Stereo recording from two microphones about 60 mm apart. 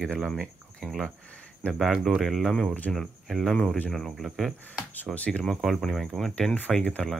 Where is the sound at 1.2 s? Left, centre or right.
Centre.